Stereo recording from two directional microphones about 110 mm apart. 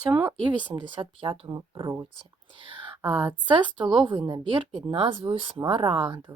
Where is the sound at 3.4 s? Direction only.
45° right (ahead or behind).